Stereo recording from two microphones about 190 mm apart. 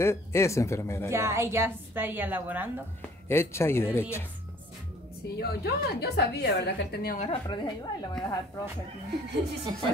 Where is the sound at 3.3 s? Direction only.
15° left (ahead or behind).